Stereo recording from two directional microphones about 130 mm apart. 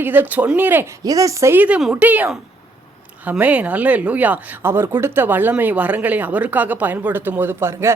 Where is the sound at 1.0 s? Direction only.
25° right (ahead or behind).